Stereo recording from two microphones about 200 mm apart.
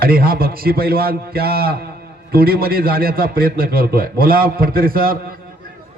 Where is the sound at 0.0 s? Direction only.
50° right (ahead or behind).